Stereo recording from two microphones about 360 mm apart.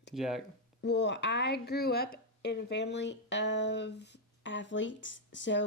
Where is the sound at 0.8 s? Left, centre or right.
Left.